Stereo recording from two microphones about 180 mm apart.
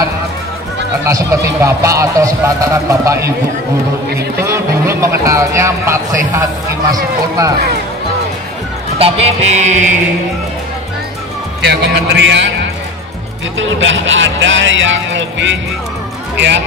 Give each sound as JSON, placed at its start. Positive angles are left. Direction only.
{"t": 1.0, "sound": "a man's voice", "side_deg": -15}
{"t": 4.4, "sound": "a man's voice", "side_deg": -15}
{"t": 8.9, "sound": "music", "side_deg": -35}
{"t": 11.6, "sound": "a man's voice", "side_deg": -65}
{"t": 13.6, "sound": "speech", "side_deg": -90}
{"t": 16.3, "sound": "a man's voice", "side_deg": -75}